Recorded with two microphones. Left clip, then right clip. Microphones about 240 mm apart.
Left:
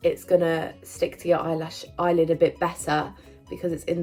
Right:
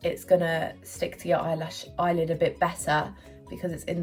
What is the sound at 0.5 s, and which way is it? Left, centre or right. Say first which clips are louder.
Speech: left 1 dB; centre.